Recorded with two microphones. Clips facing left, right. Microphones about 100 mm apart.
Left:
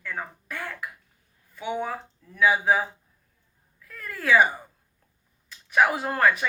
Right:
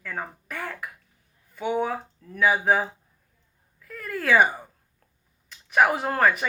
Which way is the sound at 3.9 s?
5° right (ahead or behind).